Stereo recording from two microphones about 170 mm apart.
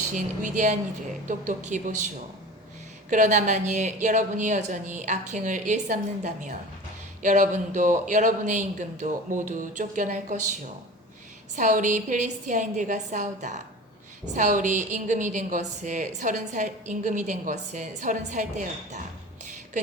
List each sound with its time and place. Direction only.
0.1 s a woman's voice: 45° right (ahead or behind)
3.1 s a woman's voice: 45° right (ahead or behind)